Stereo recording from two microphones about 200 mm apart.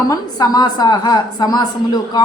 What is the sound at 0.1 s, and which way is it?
A woman's voice, 20° left (ahead or behind).